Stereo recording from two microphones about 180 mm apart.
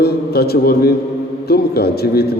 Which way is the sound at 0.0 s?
60° left (ahead or behind).